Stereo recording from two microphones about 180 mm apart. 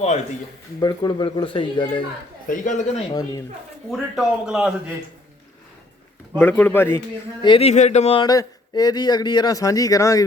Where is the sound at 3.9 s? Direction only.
Centre (ahead or behind).